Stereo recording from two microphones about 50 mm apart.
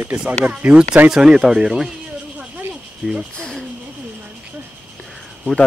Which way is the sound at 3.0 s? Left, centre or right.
Right.